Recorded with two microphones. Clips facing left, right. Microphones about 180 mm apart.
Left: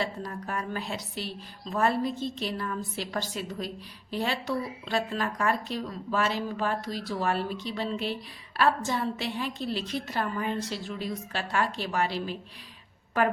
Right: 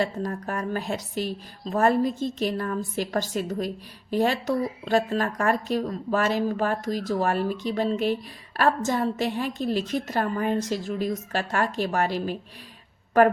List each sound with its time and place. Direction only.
0.0 s a woman's voice: 45° right (ahead or behind)